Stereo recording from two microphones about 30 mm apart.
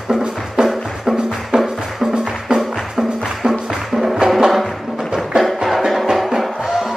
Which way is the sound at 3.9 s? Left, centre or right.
Centre.